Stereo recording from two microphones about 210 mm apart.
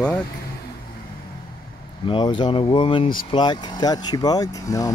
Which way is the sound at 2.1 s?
20° left (ahead or behind).